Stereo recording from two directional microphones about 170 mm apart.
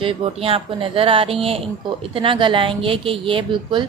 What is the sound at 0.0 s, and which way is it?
Speech, 30° right (ahead or behind).